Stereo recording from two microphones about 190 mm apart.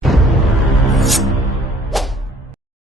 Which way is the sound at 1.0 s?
Centre (ahead or behind).